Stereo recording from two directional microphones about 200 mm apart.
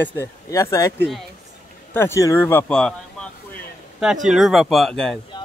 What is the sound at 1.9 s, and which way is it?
Speech, 15° left (ahead or behind).